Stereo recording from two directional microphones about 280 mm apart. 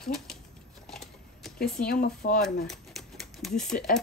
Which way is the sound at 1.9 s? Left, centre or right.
Left.